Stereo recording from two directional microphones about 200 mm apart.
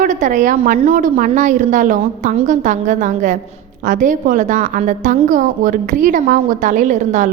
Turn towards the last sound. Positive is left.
turn(degrees=-40)  # may be behind; listen again after turning